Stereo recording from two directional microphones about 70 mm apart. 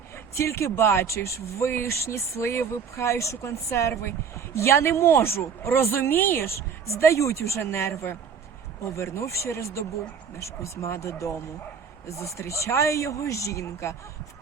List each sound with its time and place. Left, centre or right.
0.3 s speech: left
6.8 s speech: left